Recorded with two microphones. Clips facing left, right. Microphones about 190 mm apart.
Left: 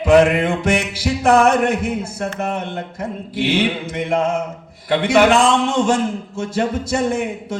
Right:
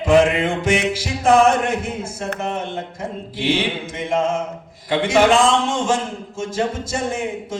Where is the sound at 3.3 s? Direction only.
60° left (ahead or behind).